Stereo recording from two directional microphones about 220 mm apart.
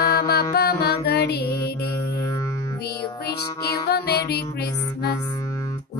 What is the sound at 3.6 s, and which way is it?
Music, 45° left (ahead or behind).